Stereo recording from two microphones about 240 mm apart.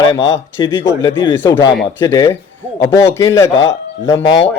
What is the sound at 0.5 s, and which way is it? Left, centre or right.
A man's voice, centre.